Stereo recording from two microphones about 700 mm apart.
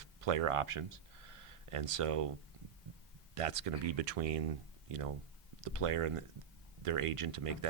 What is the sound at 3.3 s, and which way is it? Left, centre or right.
Speech, right.